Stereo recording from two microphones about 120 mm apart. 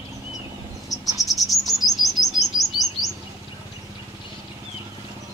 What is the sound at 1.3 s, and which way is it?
Chirp, centre (ahead or behind).